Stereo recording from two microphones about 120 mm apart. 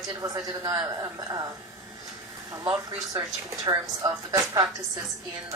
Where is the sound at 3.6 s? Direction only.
30° right (ahead or behind).